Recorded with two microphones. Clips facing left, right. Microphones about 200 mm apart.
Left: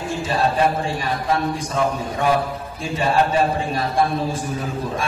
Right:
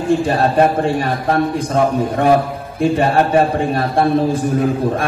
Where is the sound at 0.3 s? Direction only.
55° right (ahead or behind).